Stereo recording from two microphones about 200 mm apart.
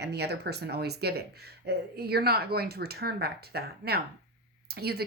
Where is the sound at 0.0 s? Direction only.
55° right (ahead or behind).